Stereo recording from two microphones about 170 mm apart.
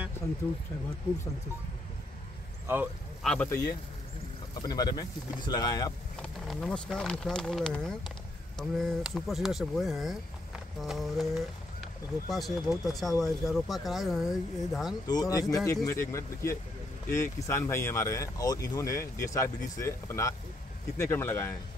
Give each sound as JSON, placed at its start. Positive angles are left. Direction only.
{"t": 2.6, "sound": "speech", "side_deg": -10}
{"t": 3.2, "sound": "speech", "side_deg": 0}
{"t": 4.6, "sound": "speech", "side_deg": 25}
{"t": 6.2, "sound": "speech", "side_deg": 0}
{"t": 15.0, "sound": "speech", "side_deg": 20}